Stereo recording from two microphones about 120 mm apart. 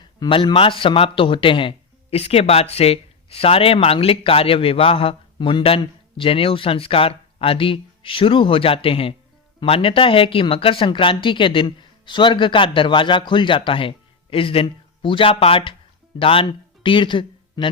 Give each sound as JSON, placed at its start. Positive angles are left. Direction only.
{"t": 0.0, "sound": "a man's voice", "side_deg": 45}